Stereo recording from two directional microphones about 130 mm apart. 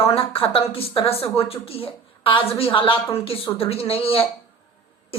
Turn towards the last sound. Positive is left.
turn(degrees=45)  # may be behind; listen again after turning